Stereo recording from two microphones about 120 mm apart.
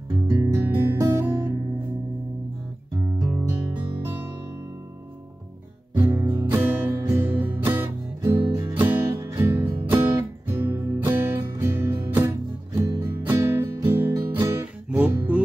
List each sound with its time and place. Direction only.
0.3 s music: 20° right (ahead or behind)
3.2 s music: 25° right (ahead or behind)
5.9 s music: 20° right (ahead or behind)